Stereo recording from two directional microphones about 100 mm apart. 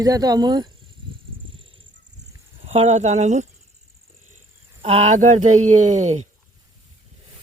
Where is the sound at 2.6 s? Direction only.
90° right.